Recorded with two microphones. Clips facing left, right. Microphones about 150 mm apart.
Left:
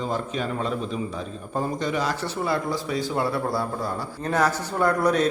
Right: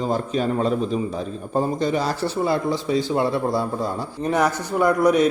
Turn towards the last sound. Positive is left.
turn(degrees=-15)  # may be behind; listen again after turning